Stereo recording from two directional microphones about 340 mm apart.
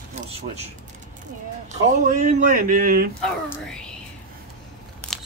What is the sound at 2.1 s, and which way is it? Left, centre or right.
Speech, right.